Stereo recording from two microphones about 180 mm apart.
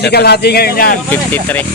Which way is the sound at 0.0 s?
65° left (ahead or behind).